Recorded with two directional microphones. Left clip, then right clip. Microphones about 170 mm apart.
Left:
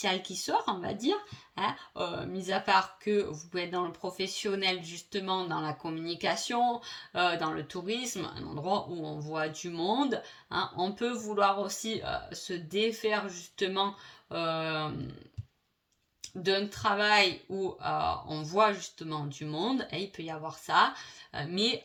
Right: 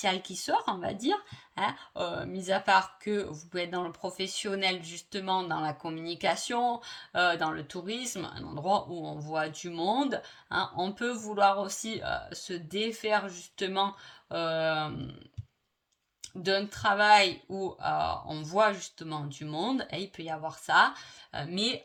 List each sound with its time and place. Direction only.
0.0 s speech: 45° right (ahead or behind)
16.2 s speech: 45° right (ahead or behind)